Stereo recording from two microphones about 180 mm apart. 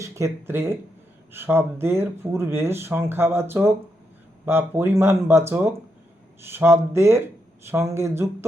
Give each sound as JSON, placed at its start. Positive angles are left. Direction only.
{"t": 0.0, "sound": "speech", "side_deg": -15}